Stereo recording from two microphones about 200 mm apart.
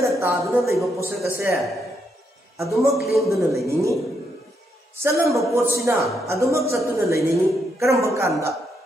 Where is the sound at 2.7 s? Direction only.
Centre (ahead or behind).